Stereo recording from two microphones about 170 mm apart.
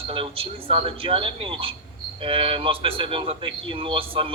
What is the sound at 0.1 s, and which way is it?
Speech, 35° right (ahead or behind).